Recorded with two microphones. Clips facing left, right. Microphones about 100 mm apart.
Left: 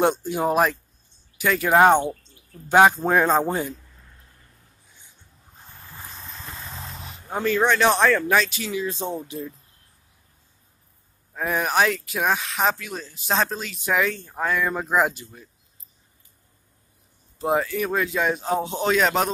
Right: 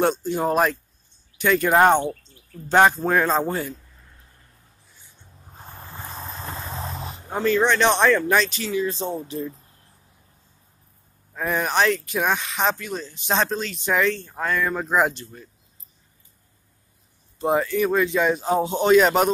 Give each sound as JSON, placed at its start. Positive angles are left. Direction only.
{"t": 0.0, "sound": "speech", "side_deg": 15}
{"t": 5.9, "sound": "a sound", "side_deg": -40}
{"t": 7.4, "sound": "speech", "side_deg": 5}
{"t": 8.6, "sound": "speech", "side_deg": 15}
{"t": 11.3, "sound": "speech", "side_deg": 5}
{"t": 17.4, "sound": "speech", "side_deg": 0}